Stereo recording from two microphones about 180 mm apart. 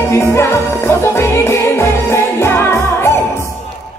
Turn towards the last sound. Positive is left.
turn(degrees=15)  # may be behind; listen again after turning